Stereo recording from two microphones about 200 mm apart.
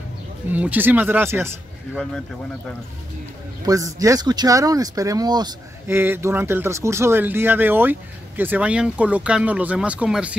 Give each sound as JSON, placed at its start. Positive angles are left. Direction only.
{"t": 0.5, "sound": "speech", "side_deg": -10}
{"t": 3.6, "sound": "speech", "side_deg": -15}